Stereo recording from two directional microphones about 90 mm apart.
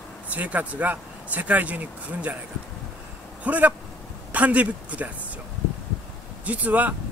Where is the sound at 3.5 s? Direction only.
15° right (ahead or behind).